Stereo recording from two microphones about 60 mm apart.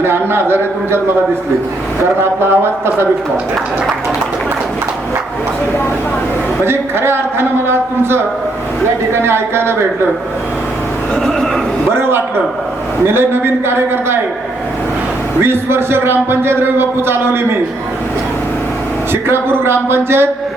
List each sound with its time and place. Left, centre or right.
0.0 s a man's voice: right
2.2 s a man's voice: right
6.7 s a man's voice: right
9.2 s a man's voice: right
11.1 s speech: centre
13.1 s a man's voice: right
15.4 s a man's voice: right
19.1 s a man's voice: right